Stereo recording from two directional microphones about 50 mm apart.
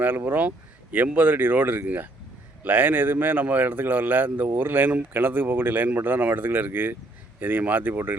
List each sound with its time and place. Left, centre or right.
0.3 s a man's voice: right